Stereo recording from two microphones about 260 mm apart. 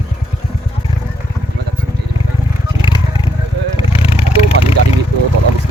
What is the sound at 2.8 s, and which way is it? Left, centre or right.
Vehicle, centre.